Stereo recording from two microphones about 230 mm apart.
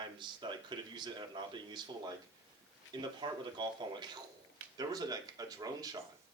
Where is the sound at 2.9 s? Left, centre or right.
Centre.